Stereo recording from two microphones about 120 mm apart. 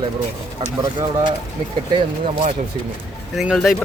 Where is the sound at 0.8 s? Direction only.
40° right (ahead or behind).